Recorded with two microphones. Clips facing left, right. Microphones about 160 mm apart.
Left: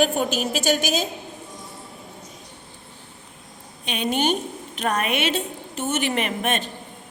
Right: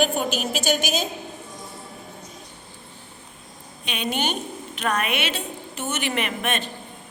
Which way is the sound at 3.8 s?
45° left (ahead or behind).